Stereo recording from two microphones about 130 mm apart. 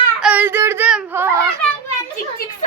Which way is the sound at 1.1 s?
20° right (ahead or behind).